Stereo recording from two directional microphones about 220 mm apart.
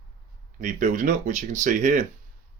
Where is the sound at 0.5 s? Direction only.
35° right (ahead or behind).